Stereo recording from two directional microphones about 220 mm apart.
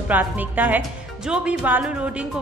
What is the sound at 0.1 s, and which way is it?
Speech, 10° right (ahead or behind).